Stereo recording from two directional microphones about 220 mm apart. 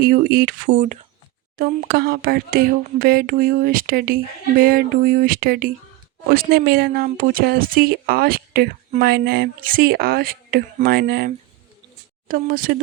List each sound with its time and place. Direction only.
0.0 s speech: 40° right (ahead or behind)
12.3 s speech: 40° right (ahead or behind)